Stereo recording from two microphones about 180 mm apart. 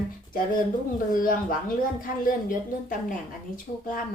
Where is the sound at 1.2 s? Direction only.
50° left (ahead or behind).